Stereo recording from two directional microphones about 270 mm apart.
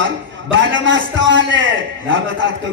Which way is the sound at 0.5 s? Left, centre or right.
Right.